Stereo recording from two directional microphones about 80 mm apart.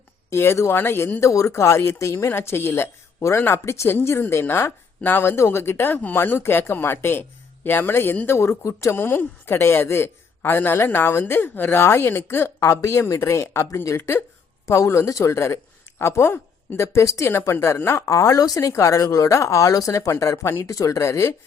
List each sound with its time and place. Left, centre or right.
0.3 s speech: left
18.7 s speech: left